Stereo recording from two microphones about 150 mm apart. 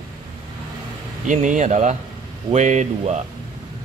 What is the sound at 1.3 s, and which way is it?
Speech, 55° right (ahead or behind).